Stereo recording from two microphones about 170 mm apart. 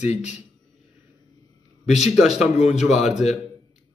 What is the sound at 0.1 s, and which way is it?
Speech, 45° left (ahead or behind).